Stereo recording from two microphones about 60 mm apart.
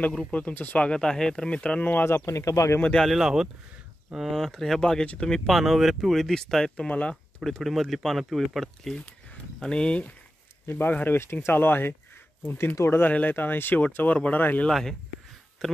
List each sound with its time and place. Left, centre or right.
0.3 s speech: left
1.8 s speech: left
2.0 s speech: left
3.0 s speech: centre
4.5 s speech: centre
5.5 s speech: centre
6.9 s speech: left
7.3 s speech: centre
9.6 s speech: centre
10.7 s speech: left
13.1 s speech: left
14.7 s speech: centre